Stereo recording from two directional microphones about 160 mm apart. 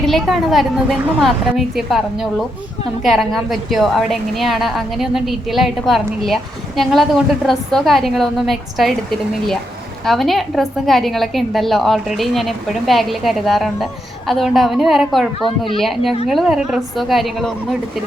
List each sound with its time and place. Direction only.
0.0 s a woman's voice: centre (ahead or behind)
15.4 s a child's voice: 30° left (ahead or behind)
15.8 s a woman's voice: centre (ahead or behind)